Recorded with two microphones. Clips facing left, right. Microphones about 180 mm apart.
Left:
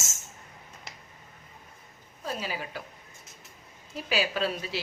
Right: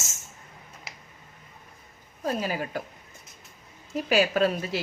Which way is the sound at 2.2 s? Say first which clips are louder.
Right 6 dB; 45° right (ahead or behind).